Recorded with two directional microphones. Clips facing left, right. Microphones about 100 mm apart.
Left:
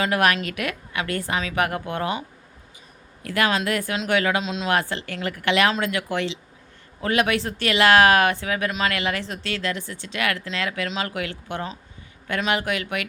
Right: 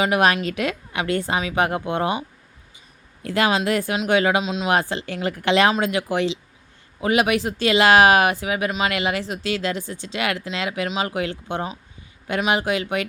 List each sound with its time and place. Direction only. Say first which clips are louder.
0.0 s a woman's voice: right 2 dB; 20° right (ahead or behind)
3.2 s a woman's voice: right 2 dB; 20° right (ahead or behind)
4.4 s speech: right 2 dB; 5° right (ahead or behind)
4.7 s a woman's voice: right 2 dB; 20° right (ahead or behind)